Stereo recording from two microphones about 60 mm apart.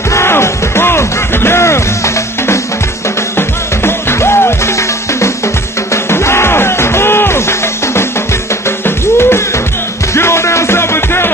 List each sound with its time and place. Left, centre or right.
0.1 s music: left